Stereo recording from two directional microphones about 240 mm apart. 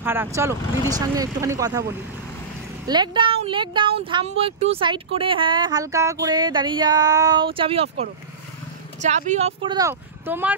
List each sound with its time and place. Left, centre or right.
0.0 s speech: centre
2.9 s speech: centre